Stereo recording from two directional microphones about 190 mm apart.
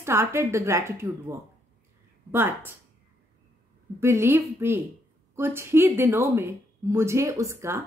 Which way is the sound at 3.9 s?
15° right (ahead or behind).